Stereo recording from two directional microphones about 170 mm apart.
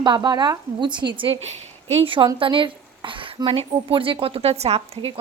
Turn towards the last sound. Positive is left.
turn(degrees=-35)  # may be behind; listen again after turning